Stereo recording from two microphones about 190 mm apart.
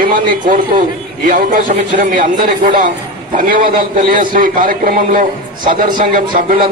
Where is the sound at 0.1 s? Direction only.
45° right (ahead or behind).